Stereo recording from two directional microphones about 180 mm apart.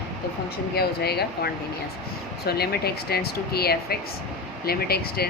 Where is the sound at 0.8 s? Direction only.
65° left (ahead or behind).